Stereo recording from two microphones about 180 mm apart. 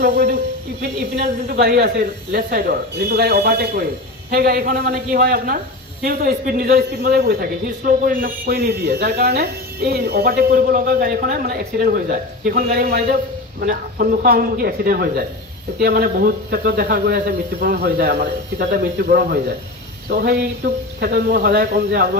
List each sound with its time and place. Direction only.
0.0 s a man's voice: 55° right (ahead or behind)